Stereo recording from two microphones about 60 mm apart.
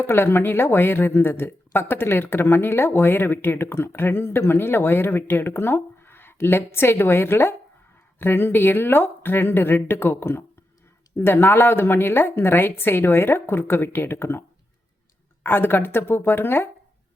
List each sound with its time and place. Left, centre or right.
0.0 s speech: left
15.4 s speech: left